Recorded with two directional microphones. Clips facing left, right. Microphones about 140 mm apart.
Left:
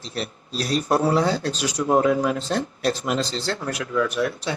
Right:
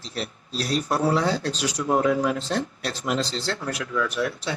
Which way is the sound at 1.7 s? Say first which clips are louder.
Left 3 dB; 25° left (ahead or behind).